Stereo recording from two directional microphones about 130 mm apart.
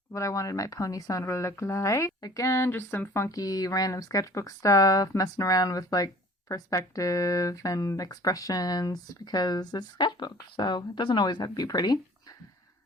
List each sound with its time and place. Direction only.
0.1 s speech: 25° left (ahead or behind)